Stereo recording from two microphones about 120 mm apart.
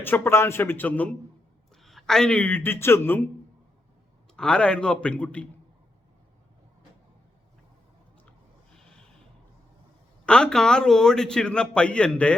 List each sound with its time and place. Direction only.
0.0 s a man's voice: 20° left (ahead or behind)
1.7 s speech: centre (ahead or behind); by 3.2 s 20° left (ahead or behind)
4.4 s a man's voice: 5° left (ahead or behind)
8.7 s a sound: 5° left (ahead or behind)
10.2 s a man's voice: 10° left (ahead or behind)